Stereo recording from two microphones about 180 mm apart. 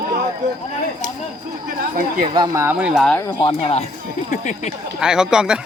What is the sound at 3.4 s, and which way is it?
Speech, 35° left (ahead or behind).